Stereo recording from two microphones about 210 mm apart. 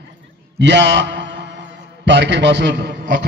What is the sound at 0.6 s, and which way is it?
Mantra, 55° right (ahead or behind).